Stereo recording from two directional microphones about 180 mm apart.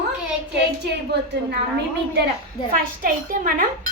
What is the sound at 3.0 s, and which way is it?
Speech, 50° right (ahead or behind).